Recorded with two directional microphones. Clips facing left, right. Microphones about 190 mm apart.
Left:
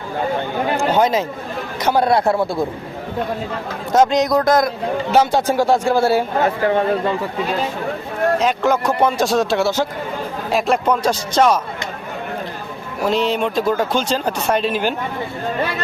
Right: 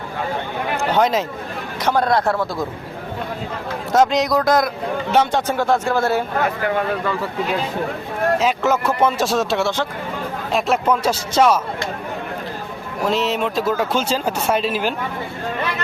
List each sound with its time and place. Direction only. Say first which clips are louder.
0.9 s speech: left 1 dB; centre (ahead or behind)
2.2 s a man's voice: left 3 dB; 25° left (ahead or behind)
3.9 s speech: left 2 dB; centre (ahead or behind)
5.5 s speech: left 3 dB; 10° left (ahead or behind)
6.4 s a man's voice: left 4 dB; 30° left (ahead or behind)
8.4 s speech: left 1 dB; 5° right (ahead or behind)
13.1 s speech: left 2 dB; centre (ahead or behind)